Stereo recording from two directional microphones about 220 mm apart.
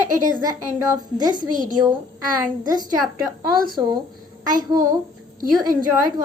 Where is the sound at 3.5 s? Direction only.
40° right (ahead or behind).